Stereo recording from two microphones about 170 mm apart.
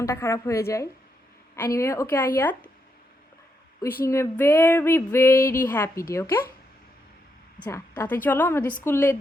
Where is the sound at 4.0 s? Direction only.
15° left (ahead or behind).